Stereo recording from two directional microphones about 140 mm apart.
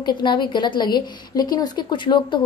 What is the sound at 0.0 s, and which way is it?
A woman's voice, 35° left (ahead or behind).